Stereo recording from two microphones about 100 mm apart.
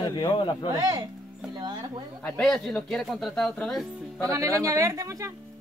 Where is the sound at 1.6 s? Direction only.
50° right (ahead or behind).